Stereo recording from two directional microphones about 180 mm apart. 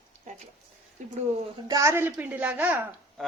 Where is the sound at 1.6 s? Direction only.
20° right (ahead or behind).